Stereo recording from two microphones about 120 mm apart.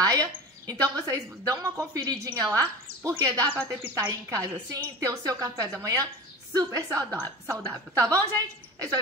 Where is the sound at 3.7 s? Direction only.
20° right (ahead or behind).